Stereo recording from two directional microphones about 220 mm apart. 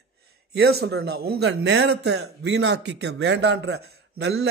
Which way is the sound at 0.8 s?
50° right (ahead or behind).